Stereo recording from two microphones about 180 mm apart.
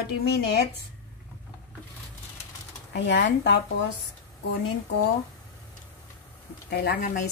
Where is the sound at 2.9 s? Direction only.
75° left (ahead or behind).